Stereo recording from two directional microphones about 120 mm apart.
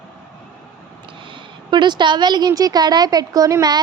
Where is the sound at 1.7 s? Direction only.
40° right (ahead or behind).